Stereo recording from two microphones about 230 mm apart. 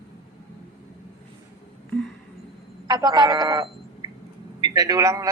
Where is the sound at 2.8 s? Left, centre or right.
Centre.